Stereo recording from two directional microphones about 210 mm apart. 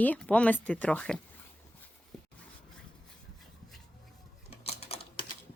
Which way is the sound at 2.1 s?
5° left (ahead or behind).